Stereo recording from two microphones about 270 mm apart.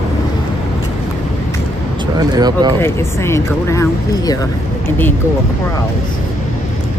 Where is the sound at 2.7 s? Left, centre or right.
Centre.